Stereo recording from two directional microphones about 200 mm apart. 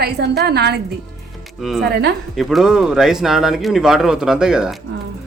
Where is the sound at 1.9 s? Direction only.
60° right (ahead or behind).